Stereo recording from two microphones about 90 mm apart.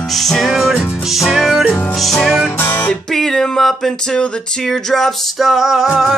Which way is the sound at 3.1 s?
5° left (ahead or behind).